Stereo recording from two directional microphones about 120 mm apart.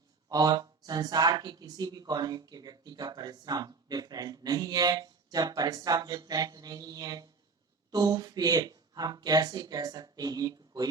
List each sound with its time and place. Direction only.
0.3 s speech: 30° right (ahead or behind)